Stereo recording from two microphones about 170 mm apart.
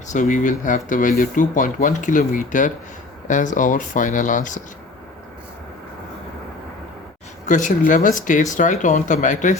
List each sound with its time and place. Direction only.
0.1 s speech: 45° left (ahead or behind)
7.4 s speech: 50° left (ahead or behind)